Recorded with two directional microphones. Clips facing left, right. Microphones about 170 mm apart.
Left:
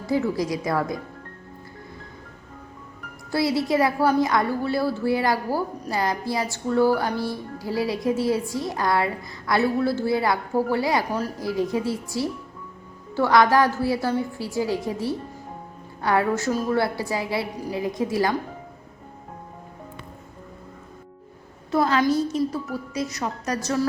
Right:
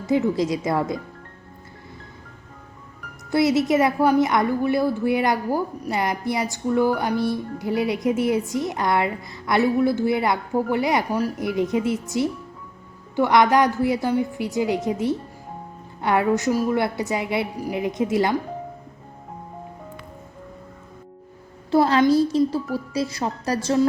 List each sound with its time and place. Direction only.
0.0 s a woman's voice: 20° right (ahead or behind)
3.3 s a woman's voice: 20° right (ahead or behind)
21.7 s a woman's voice: 30° right (ahead or behind)